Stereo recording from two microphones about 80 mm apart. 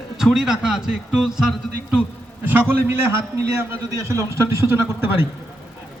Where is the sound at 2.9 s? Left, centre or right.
Right.